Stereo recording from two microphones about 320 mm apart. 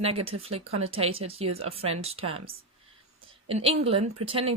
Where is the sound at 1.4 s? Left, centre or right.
Right.